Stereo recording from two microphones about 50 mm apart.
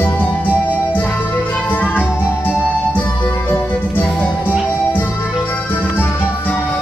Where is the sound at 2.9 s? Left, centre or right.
Left.